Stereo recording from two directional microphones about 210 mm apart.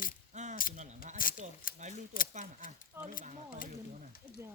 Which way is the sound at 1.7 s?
40° left (ahead or behind).